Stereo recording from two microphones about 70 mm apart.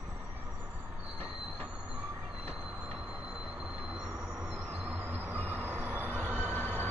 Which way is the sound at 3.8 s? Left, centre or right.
Centre.